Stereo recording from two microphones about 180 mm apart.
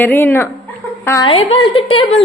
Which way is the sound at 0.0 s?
10° left (ahead or behind).